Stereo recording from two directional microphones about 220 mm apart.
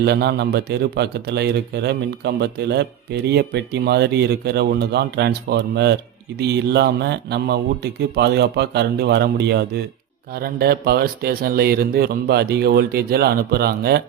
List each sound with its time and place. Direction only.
0.0 s a man's voice: 50° right (ahead or behind)